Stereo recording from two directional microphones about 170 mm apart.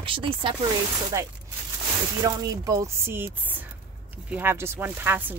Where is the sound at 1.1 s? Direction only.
15° right (ahead or behind).